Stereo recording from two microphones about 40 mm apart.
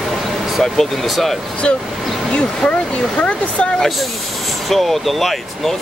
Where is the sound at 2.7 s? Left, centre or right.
Left.